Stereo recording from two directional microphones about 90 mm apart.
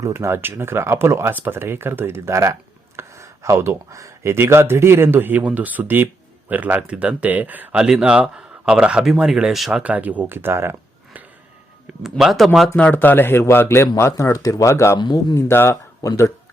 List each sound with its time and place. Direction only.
0.0 s speech: 30° right (ahead or behind); by 9.8 s 5° right (ahead or behind)
9.8 s speech: 15° right (ahead or behind)
12.0 s speech: 5° right (ahead or behind)
12.7 s speech: 15° left (ahead or behind)
14.9 s a man's voice: 55° left (ahead or behind)
15.4 s speech: 30° left (ahead or behind)